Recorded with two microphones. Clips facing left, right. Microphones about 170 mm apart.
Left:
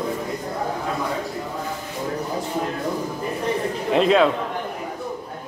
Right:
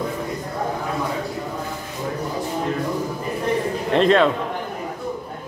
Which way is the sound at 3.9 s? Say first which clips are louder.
Right 1 dB; 5° left (ahead or behind).